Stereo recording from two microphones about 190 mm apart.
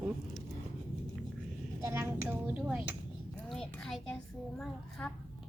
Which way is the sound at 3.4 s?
5° left (ahead or behind).